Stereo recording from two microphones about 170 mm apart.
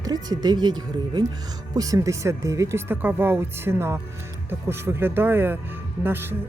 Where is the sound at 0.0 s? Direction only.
25° right (ahead or behind).